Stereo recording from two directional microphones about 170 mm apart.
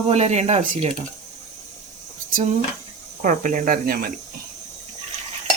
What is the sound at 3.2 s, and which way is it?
Speech, 50° right (ahead or behind).